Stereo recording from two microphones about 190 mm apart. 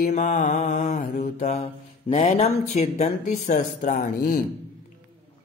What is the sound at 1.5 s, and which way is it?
Speech, 35° left (ahead or behind).